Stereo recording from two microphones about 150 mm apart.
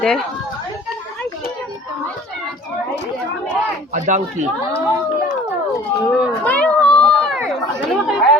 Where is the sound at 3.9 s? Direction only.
55° right (ahead or behind).